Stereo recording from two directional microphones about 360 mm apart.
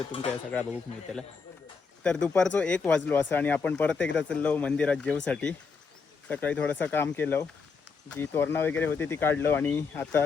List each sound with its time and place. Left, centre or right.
0.1 s speech: centre
2.0 s speech: centre